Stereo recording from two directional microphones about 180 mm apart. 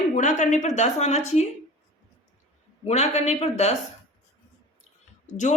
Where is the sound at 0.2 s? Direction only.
45° left (ahead or behind).